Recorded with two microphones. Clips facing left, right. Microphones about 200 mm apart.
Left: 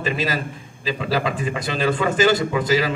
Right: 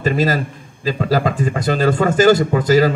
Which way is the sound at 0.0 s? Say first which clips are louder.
Right 6 dB; 45° right (ahead or behind).